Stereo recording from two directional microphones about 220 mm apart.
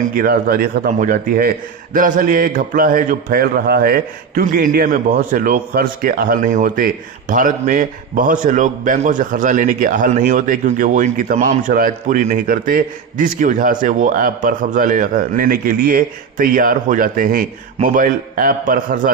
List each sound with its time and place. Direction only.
0.1 s a man's voice: 40° right (ahead or behind)